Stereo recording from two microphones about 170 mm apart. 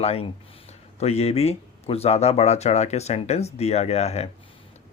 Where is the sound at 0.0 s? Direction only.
35° left (ahead or behind).